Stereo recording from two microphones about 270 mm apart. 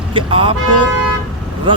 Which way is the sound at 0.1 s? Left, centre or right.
Centre.